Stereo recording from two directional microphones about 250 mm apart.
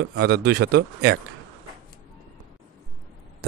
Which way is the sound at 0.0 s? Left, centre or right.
Right.